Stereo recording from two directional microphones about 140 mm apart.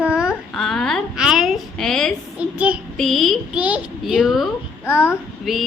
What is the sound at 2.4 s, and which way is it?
Child singing, 10° right (ahead or behind).